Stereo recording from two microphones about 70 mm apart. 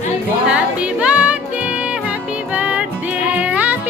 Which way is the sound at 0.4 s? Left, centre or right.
Centre.